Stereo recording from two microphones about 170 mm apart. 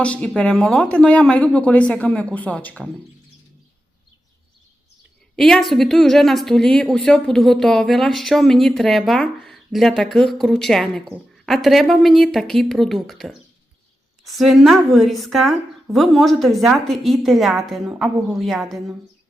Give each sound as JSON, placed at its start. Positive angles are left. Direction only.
{"t": 0.0, "sound": "speech", "side_deg": 5}
{"t": 5.4, "sound": "speech", "side_deg": 0}